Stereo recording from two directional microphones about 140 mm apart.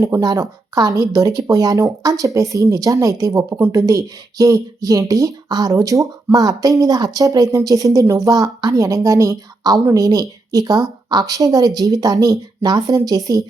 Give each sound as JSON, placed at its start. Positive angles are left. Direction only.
{"t": 0.0, "sound": "speech", "side_deg": -25}